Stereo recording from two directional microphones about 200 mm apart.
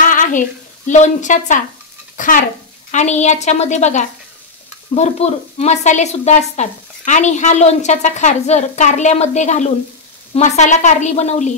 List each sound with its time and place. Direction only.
0.0 s a woman's voice: 40° left (ahead or behind)